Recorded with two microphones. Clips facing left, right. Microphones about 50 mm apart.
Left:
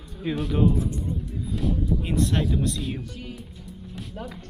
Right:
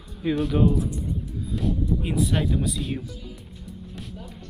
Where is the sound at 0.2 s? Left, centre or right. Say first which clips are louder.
Right 2 dB; centre.